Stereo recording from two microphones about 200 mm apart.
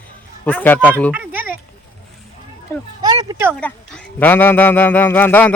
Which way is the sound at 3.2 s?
10° right (ahead or behind).